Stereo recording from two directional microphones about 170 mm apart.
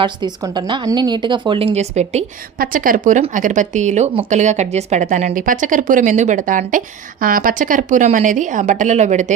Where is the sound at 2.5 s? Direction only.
55° right (ahead or behind).